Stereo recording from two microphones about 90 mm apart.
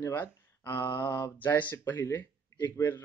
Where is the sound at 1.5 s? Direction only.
20° left (ahead or behind).